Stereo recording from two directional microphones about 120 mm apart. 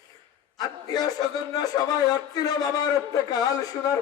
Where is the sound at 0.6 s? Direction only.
35° left (ahead or behind).